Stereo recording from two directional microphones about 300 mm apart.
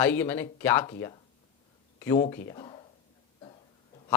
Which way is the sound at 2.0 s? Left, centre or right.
Centre.